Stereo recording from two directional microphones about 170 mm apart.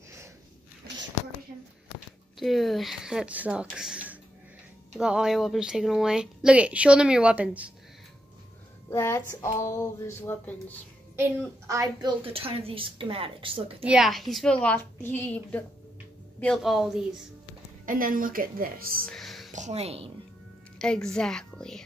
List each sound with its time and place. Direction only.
2.3 s speech: centre (ahead or behind)
8.9 s a woman's voice: 15° left (ahead or behind)
11.1 s a woman's voice: 15° right (ahead or behind)
12.3 s a woman's voice: 35° right (ahead or behind)
13.8 s a woman's voice: 5° right (ahead or behind)
17.8 s a woman's voice: 55° right (ahead or behind)
19.0 s music: centre (ahead or behind)
19.5 s a woman's voice: 40° right (ahead or behind)
20.8 s speech: 5° left (ahead or behind)